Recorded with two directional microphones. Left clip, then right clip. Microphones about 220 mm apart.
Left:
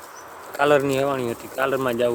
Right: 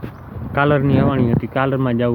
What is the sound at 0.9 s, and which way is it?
Speech, 5° right (ahead or behind).